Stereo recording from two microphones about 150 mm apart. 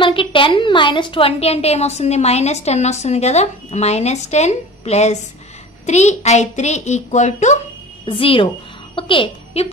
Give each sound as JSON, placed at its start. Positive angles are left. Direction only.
{"t": 0.0, "sound": "a woman's voice", "side_deg": 35}
{"t": 8.0, "sound": "a woman's voice", "side_deg": 35}